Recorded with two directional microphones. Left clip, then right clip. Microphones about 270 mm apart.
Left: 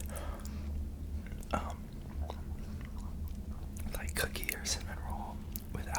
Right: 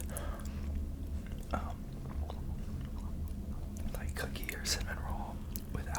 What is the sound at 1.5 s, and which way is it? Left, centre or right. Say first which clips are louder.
Chewing: left 3 dB; centre.